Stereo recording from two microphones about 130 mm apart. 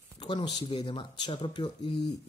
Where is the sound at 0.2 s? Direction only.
35° left (ahead or behind).